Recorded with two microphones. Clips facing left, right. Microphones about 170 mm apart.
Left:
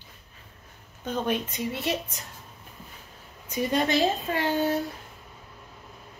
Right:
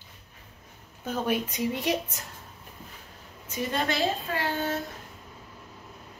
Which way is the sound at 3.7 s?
15° left (ahead or behind).